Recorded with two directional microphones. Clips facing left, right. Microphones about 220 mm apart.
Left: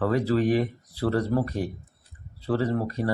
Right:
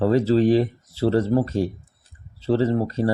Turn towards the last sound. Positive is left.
turn(degrees=-25)  # may be behind; listen again after turning